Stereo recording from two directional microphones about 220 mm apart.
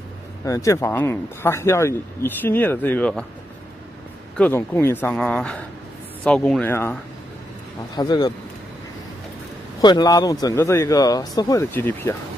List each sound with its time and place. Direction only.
0.5 s speech: 15° left (ahead or behind)
4.4 s speech: 10° left (ahead or behind)
9.8 s speech: 20° left (ahead or behind)